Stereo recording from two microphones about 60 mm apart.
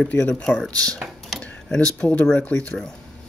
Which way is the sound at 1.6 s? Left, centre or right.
Centre.